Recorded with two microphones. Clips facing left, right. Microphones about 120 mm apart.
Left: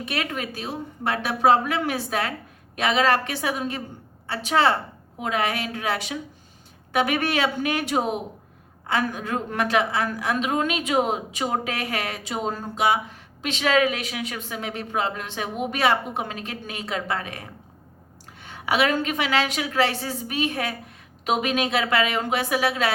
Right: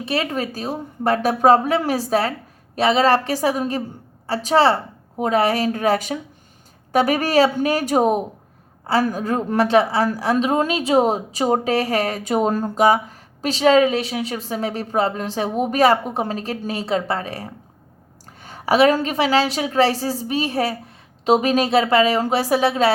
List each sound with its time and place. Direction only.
0.0 s a woman's voice: 30° right (ahead or behind)